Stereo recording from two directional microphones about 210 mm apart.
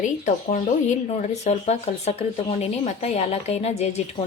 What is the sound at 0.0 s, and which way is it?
A woman's voice, 35° left (ahead or behind).